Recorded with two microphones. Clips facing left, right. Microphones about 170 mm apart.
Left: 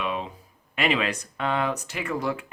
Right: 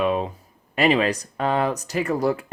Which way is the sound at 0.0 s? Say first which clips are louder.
Right 8 dB; 45° right (ahead or behind).